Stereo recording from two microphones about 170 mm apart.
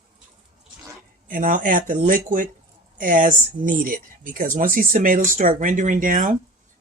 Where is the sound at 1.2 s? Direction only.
55° right (ahead or behind).